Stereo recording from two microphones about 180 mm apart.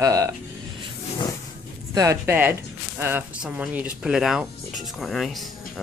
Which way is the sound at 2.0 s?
15° right (ahead or behind).